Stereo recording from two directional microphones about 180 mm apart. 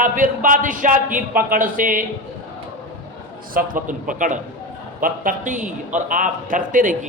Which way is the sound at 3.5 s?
50° right (ahead or behind).